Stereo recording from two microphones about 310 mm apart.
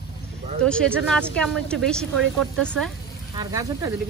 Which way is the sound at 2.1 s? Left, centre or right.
Right.